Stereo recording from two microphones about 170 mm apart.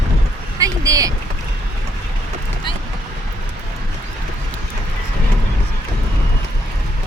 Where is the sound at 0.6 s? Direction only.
20° right (ahead or behind).